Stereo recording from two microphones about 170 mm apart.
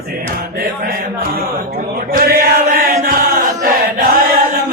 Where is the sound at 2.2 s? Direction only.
60° right (ahead or behind).